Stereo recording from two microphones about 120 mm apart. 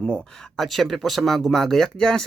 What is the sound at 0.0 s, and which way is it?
Speech, centre (ahead or behind).